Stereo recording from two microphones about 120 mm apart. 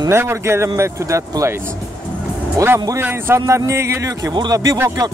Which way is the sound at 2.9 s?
20° right (ahead or behind).